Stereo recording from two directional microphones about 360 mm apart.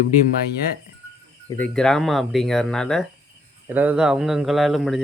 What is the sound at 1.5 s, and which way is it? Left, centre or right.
Speech, centre.